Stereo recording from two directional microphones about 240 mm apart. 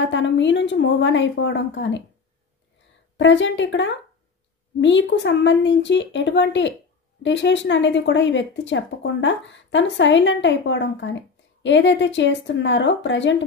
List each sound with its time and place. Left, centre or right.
0.0 s speech: left
3.2 s speech: left